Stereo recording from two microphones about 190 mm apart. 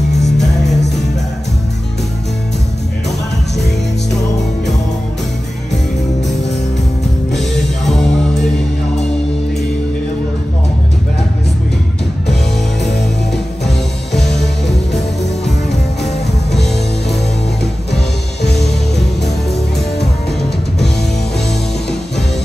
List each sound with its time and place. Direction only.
0.4 s music: centre (ahead or behind)
7.3 s music: centre (ahead or behind)
18.4 s music: 60° left (ahead or behind)